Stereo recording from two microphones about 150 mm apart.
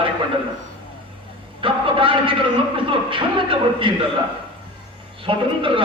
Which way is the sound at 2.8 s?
35° right (ahead or behind).